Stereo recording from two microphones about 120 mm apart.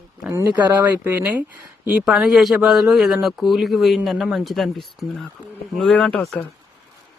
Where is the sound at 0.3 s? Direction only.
20° right (ahead or behind).